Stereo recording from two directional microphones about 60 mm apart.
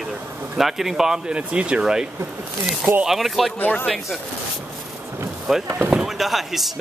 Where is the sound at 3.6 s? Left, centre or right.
Left.